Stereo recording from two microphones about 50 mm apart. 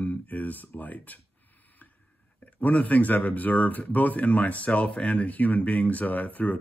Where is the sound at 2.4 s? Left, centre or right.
Left.